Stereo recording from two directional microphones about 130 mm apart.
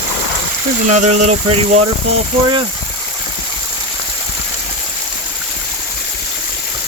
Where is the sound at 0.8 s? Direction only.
65° right (ahead or behind).